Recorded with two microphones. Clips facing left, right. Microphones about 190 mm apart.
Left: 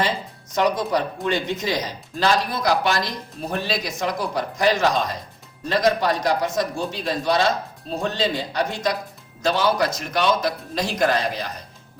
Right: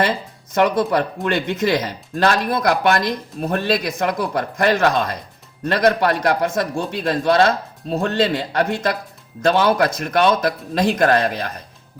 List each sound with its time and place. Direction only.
0.5 s speech: 60° right (ahead or behind)